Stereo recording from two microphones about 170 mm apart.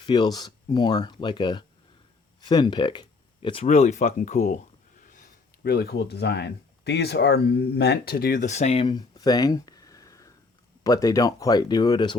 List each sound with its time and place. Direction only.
0.0 s speech: 25° left (ahead or behind); by 5.1 s 50° left (ahead or behind)
5.6 s speech: 65° left (ahead or behind); by 12.1 s 25° left (ahead or behind)